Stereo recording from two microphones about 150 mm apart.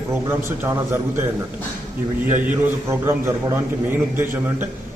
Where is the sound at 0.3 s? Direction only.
15° right (ahead or behind).